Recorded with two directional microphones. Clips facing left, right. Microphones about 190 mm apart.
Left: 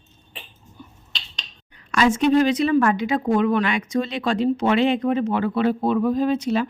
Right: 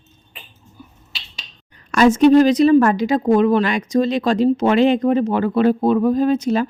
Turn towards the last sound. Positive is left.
turn(degrees=-45)  # may be behind; listen again after turning